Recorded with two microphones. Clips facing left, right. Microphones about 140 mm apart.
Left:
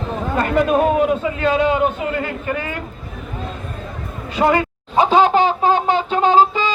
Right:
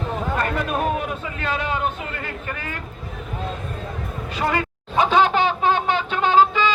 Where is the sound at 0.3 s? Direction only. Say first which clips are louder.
Left 10 dB; 20° left (ahead or behind).